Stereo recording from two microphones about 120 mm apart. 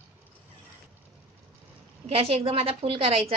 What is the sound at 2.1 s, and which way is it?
A woman's voice, 55° right (ahead or behind).